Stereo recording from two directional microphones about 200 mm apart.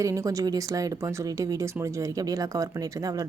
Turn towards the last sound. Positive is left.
turn(degrees=-15)  # may be behind; listen again after turning